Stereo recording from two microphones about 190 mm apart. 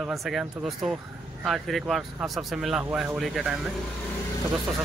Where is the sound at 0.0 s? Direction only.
Centre (ahead or behind).